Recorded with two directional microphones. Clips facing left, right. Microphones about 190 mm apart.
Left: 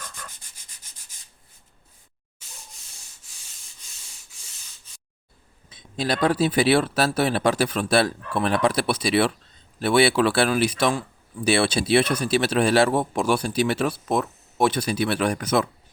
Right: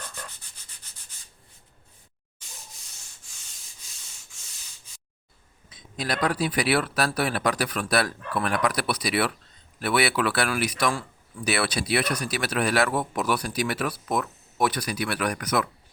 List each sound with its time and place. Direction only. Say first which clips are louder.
5.7 s speech: left 4 dB; 30° left (ahead or behind)